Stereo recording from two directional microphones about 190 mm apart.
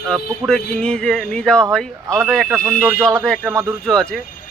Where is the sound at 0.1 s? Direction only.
5° left (ahead or behind).